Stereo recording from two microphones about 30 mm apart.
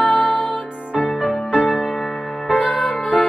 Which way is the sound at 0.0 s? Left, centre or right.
Left.